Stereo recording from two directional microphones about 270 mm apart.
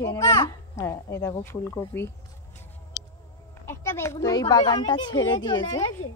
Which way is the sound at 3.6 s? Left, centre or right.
Centre.